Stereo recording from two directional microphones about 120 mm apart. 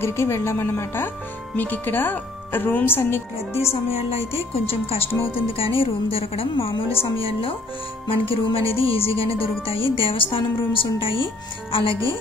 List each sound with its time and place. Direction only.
0.0 s speech: 20° left (ahead or behind)
3.9 s speech: 55° left (ahead or behind)
8.1 s speech: 50° left (ahead or behind)